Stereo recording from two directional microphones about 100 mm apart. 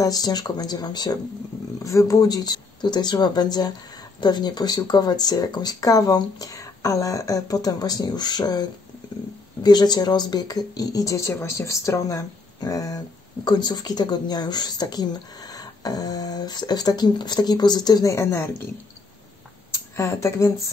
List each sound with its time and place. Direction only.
0.0 s speech: 40° left (ahead or behind)
1.8 s speech: 30° left (ahead or behind)
20.0 s speech: 25° left (ahead or behind)